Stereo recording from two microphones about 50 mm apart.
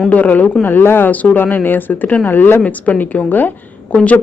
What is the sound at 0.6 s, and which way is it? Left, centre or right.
A woman's voice, left.